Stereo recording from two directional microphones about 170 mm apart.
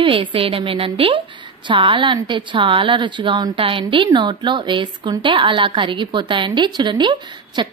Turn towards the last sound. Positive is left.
turn(degrees=-25)  # may be behind; listen again after turning